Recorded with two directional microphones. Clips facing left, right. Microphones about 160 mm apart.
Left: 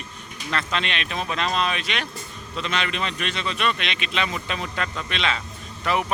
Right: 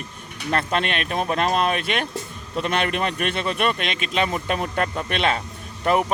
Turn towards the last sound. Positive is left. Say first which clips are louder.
# right 4 dB
turn(degrees=-40)  # may be behind; listen again after turning